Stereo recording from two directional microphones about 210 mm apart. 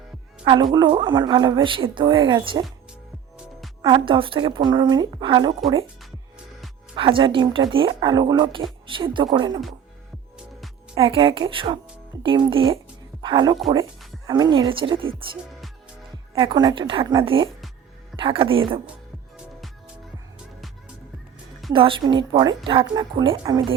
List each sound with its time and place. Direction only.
0.4 s a woman's voice: 20° right (ahead or behind)
3.8 s a woman's voice: 25° right (ahead or behind)
6.9 s a woman's voice: 25° right (ahead or behind)
10.9 s a woman's voice: 25° right (ahead or behind)
16.3 s a woman's voice: 20° right (ahead or behind)
21.7 s a woman's voice: 25° right (ahead or behind)